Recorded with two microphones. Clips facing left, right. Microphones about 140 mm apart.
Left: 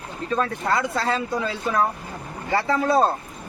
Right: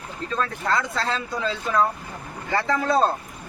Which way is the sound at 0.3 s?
15° left (ahead or behind).